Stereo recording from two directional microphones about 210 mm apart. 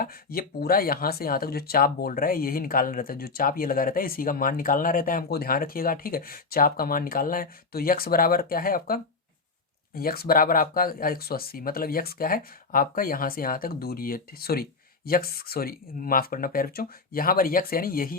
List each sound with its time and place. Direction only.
0.0 s speech: 45° left (ahead or behind)